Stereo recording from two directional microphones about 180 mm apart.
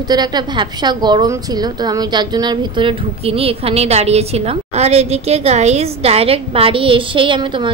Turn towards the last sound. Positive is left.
turn(degrees=-25)  # may be behind; listen again after turning